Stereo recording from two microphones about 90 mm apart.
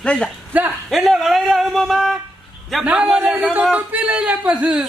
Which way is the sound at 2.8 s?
15° right (ahead or behind).